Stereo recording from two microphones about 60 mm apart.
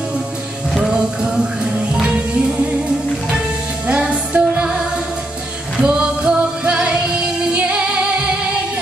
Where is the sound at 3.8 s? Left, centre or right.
Centre.